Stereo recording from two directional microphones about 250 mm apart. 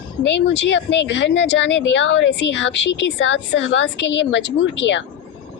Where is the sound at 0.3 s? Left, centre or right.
Left.